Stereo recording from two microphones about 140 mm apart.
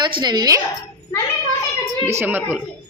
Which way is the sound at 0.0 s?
30° right (ahead or behind).